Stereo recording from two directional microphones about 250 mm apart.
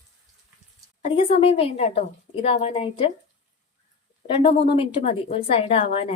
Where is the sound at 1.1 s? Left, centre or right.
Left.